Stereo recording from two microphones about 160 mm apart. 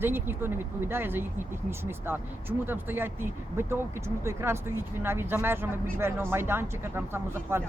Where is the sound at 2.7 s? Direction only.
15° right (ahead or behind).